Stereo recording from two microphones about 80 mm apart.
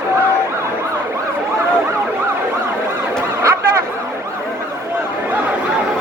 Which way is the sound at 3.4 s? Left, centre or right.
Right.